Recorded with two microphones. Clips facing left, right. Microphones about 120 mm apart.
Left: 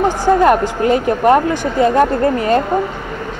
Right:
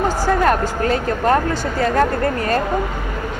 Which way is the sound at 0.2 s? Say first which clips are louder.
Left 6 dB; 20° left (ahead or behind).